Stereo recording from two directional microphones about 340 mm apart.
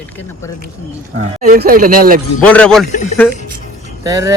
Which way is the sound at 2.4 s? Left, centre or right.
Centre.